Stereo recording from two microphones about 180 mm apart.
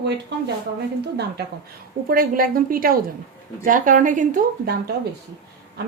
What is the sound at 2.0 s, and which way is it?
Speech, 55° right (ahead or behind).